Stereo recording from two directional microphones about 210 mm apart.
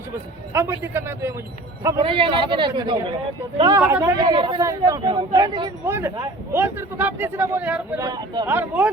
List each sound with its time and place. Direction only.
0.5 s a man's voice: 10° right (ahead or behind)
2.0 s a man's voice: 25° right (ahead or behind)